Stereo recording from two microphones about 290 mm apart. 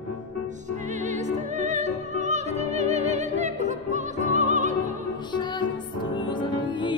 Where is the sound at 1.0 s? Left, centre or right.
Right.